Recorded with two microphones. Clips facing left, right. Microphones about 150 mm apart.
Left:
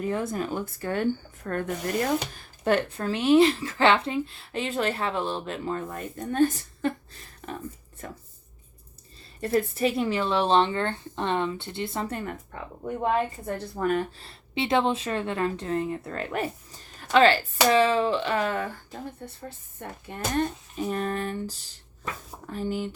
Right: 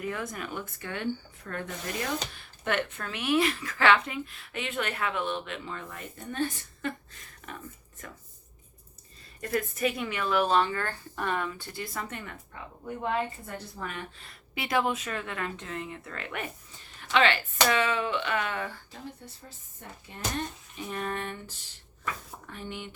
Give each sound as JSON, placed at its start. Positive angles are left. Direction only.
{"t": 0.0, "sound": "speech", "side_deg": 30}
{"t": 9.4, "sound": "speech", "side_deg": 30}
{"t": 13.7, "sound": "speech", "side_deg": 45}
{"t": 20.7, "sound": "speech", "side_deg": 40}